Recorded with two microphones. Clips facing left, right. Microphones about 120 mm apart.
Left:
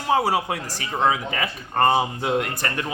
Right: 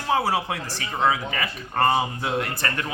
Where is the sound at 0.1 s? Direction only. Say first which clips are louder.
Left 2 dB; 15° left (ahead or behind).